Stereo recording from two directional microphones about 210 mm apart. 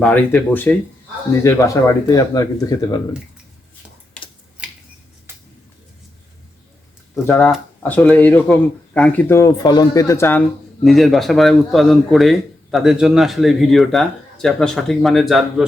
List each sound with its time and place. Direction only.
0.0 s speech: 5° left (ahead or behind)
7.3 s speech: 10° left (ahead or behind)
10.8 s speech: centre (ahead or behind)